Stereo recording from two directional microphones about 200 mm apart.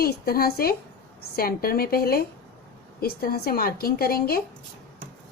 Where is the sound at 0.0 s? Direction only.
50° left (ahead or behind).